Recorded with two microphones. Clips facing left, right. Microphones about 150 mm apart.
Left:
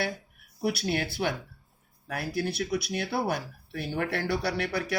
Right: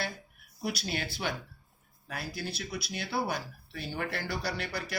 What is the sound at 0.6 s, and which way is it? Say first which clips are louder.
Speech: left 6 dB; 60° left (ahead or behind).